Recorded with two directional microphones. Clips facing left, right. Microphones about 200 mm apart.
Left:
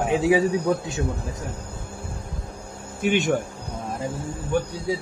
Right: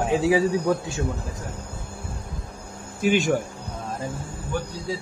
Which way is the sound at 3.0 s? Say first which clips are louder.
Right 1 dB; centre (ahead or behind).